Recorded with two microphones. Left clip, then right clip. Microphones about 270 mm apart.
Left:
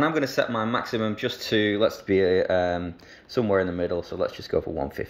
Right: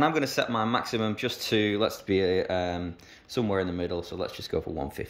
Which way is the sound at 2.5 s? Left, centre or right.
Right.